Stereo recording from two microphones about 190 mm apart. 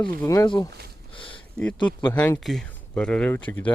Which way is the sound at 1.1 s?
25° left (ahead or behind).